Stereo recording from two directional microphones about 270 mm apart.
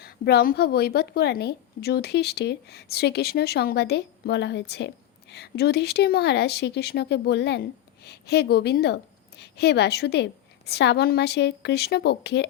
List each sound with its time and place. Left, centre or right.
0.0 s a woman's voice: left